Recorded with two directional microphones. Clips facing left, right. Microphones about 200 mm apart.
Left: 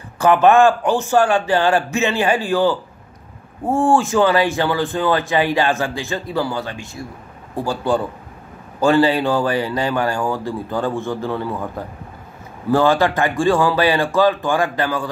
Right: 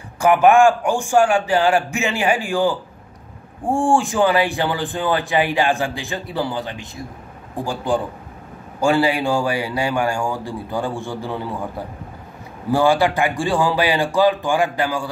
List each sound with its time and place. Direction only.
0.2 s a man's voice: 15° right (ahead or behind)
12.7 s a man's voice: 15° right (ahead or behind)